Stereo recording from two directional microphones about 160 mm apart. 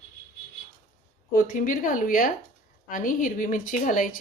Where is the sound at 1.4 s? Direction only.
55° left (ahead or behind).